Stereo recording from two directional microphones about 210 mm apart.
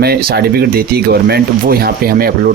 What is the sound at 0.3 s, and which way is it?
Speech, 45° right (ahead or behind).